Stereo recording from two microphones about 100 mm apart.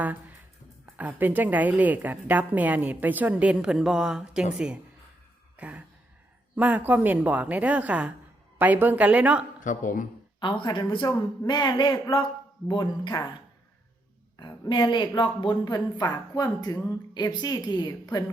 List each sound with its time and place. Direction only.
0.0 s a woman's voice: 15° right (ahead or behind)
5.5 s a sound: 15° right (ahead or behind)
6.6 s a woman's voice: 15° right (ahead or behind)
10.4 s a woman's voice: 55° left (ahead or behind)
14.7 s a woman's voice: 50° left (ahead or behind)